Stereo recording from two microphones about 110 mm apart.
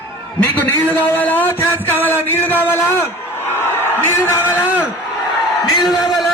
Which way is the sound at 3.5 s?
20° left (ahead or behind).